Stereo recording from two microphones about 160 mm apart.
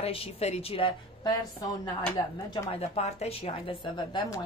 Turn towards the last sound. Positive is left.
turn(degrees=30)  # may be behind; listen again after turning